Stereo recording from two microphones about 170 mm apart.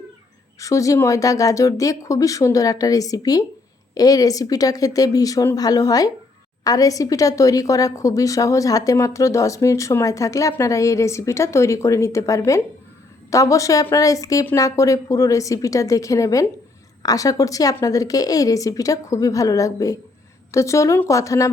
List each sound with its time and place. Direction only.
0.6 s a woman's voice: 20° left (ahead or behind)